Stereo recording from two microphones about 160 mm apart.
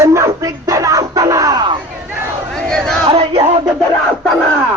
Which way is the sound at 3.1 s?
40° right (ahead or behind).